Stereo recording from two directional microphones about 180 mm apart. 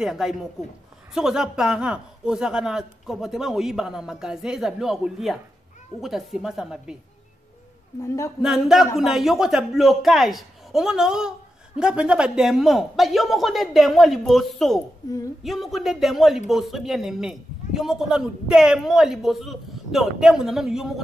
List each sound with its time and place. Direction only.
0.0 s a man's voice: 5° right (ahead or behind)
8.4 s a man's voice: 5° right (ahead or behind)